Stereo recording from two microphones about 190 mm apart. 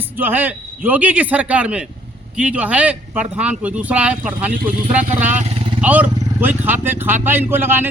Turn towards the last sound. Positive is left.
turn(degrees=-10)  # may be behind; listen again after turning